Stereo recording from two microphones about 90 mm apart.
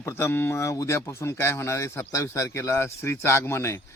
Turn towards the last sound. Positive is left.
turn(degrees=30)  # may be behind; listen again after turning